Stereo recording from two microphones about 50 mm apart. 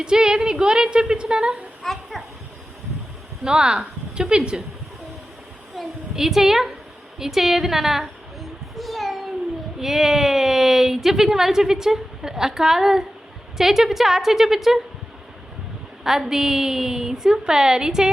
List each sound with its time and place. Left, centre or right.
0.0 s speech: centre
1.8 s a sound: centre
3.4 s speech: centre
5.7 s a woman's voice: centre
7.2 s a sound: centre
9.8 s speech: centre
16.0 s speech: centre